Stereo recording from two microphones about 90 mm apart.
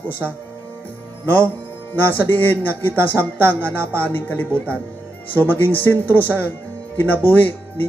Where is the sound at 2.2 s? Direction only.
20° left (ahead or behind).